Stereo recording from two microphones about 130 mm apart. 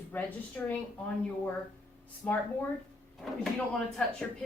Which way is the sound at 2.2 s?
15° left (ahead or behind).